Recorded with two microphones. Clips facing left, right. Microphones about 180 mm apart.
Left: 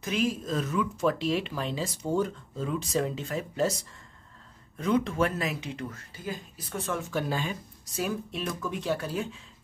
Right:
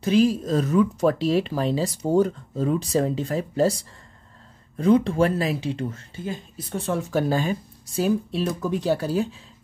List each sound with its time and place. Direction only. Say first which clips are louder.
0.0 s speech: right 9 dB; 35° right (ahead or behind)
4.7 s speech: right 7 dB; 35° right (ahead or behind)
7.8 s speech: right 9 dB; 30° right (ahead or behind)